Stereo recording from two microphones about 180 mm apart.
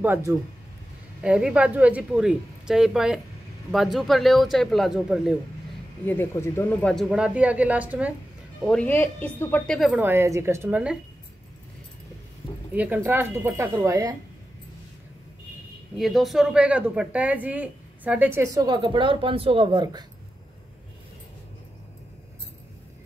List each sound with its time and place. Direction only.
0.0 s a woman's voice: 15° right (ahead or behind)
6.0 s speech: 15° left (ahead or behind); by 8.1 s 10° right (ahead or behind)
8.6 s a woman's voice: 10° left (ahead or behind)
9.8 s a woman's voice: 5° right (ahead or behind)
12.7 s a woman's voice: 10° right (ahead or behind)
16.0 s a woman's voice: centre (ahead or behind); by 20.1 s 25° right (ahead or behind)